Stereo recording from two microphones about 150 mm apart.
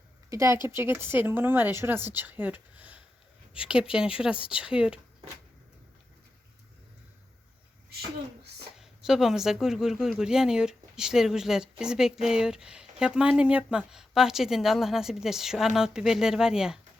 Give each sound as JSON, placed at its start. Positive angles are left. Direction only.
{"t": 0.3, "sound": "speech", "side_deg": -20}
{"t": 8.8, "sound": "a woman's voice", "side_deg": -5}